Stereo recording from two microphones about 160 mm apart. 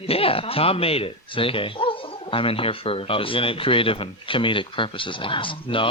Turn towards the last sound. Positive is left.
turn(degrees=30)  # may be behind; listen again after turning